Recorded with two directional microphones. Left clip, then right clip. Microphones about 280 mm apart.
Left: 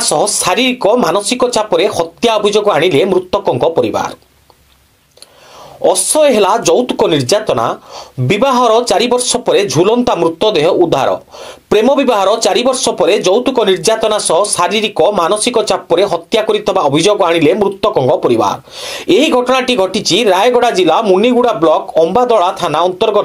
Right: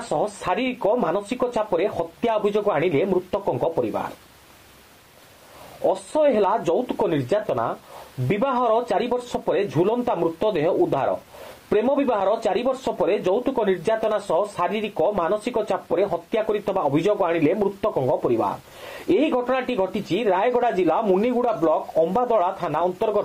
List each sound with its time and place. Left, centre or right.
0.1 s speech: left
5.9 s speech: left